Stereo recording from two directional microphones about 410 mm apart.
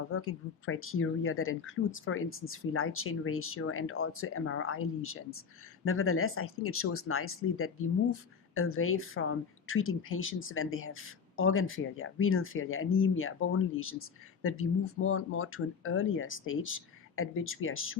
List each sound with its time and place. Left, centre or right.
0.1 s speech: left